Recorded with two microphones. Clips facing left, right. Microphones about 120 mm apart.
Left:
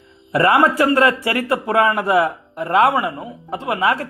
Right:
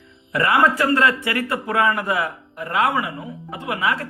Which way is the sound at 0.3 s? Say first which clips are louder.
Left 4 dB; 35° left (ahead or behind).